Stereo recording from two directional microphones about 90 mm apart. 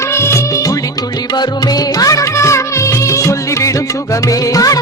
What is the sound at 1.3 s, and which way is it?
Music, 50° left (ahead or behind).